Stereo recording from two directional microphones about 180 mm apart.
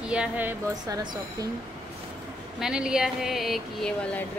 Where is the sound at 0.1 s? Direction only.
10° right (ahead or behind).